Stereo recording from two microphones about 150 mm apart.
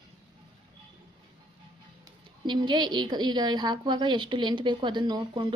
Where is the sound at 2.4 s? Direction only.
30° right (ahead or behind).